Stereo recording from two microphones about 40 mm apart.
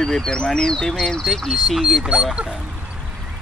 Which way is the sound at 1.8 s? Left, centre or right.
Centre.